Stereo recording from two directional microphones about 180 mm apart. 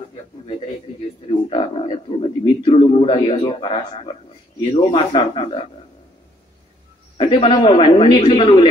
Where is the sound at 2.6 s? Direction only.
30° left (ahead or behind).